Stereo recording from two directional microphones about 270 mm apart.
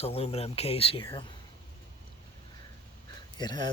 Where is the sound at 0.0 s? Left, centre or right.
Left.